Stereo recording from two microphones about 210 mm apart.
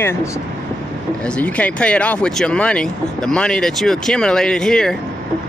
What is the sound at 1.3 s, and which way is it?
Speech, 5° left (ahead or behind).